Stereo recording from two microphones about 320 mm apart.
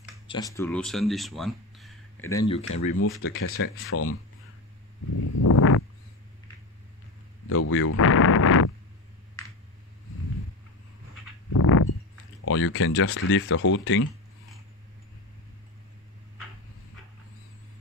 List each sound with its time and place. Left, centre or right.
0.3 s speech: centre
3.0 s speech: left
5.2 s a sound: left
7.4 s speech: left
11.5 s a sound: left
12.4 s speech: left